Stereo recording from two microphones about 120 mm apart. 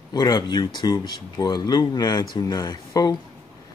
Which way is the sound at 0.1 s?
35° left (ahead or behind).